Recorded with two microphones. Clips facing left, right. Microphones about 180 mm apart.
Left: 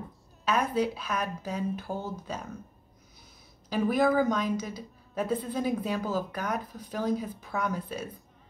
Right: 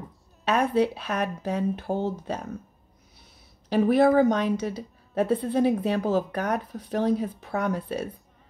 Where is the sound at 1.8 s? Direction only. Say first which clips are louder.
Right 8 dB; 25° right (ahead or behind).